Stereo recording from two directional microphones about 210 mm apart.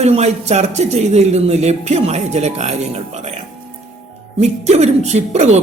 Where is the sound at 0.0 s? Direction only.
30° right (ahead or behind).